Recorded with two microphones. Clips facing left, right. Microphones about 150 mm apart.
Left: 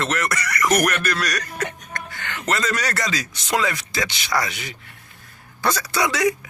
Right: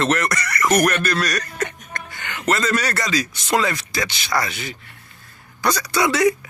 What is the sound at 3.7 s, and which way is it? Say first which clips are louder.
Speech: right 1 dB; 20° left (ahead or behind).